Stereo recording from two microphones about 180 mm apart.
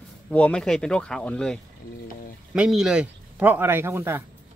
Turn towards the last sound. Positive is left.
turn(degrees=-15)  # may be behind; listen again after turning